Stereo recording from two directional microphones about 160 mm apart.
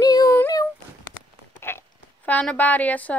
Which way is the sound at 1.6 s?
15° left (ahead or behind).